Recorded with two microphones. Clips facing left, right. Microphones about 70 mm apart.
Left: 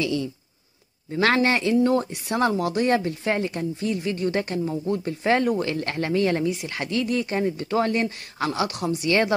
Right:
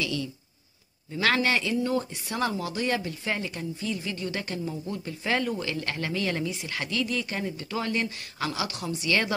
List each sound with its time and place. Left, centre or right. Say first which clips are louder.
0.0 s speech: left 5 dB; left
1.1 s speech: left 4 dB; left
2.5 s speech: left 7 dB; left
7.5 s speech: left 7 dB; left